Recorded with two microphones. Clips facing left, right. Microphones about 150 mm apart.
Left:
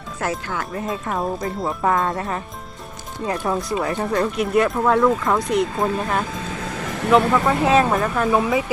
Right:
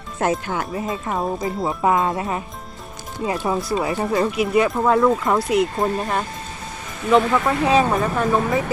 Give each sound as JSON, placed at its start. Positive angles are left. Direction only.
{"t": 0.2, "sound": "speech", "side_deg": -20}
{"t": 0.8, "sound": "speech", "side_deg": 0}
{"t": 3.4, "sound": "speech", "side_deg": -5}